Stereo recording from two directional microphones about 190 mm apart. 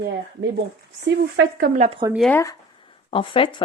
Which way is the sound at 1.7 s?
35° right (ahead or behind).